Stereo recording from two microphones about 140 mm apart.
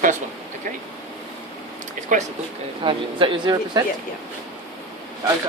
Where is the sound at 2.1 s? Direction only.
65° right (ahead or behind).